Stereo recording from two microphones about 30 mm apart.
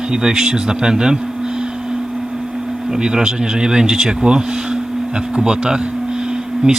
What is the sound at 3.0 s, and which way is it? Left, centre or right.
Speech, right.